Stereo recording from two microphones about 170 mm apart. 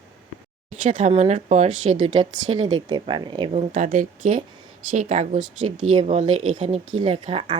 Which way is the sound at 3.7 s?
45° right (ahead or behind).